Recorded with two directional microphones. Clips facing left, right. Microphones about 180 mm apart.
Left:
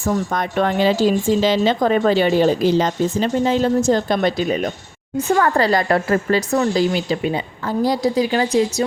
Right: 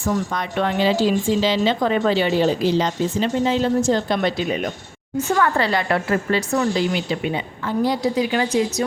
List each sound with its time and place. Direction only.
0.0 s a woman's voice: 45° left (ahead or behind)